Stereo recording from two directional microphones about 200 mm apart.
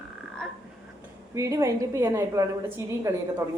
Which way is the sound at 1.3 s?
15° right (ahead or behind).